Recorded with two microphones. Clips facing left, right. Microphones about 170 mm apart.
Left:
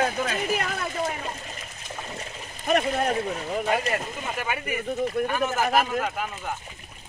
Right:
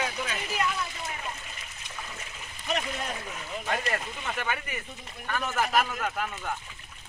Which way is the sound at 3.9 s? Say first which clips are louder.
Left 4 dB; 15° left (ahead or behind).